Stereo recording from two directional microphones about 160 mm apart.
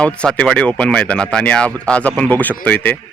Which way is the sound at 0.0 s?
5° left (ahead or behind).